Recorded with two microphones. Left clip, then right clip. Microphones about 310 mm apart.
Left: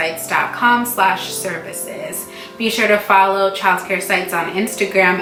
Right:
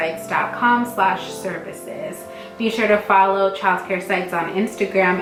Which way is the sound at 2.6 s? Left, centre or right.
Centre.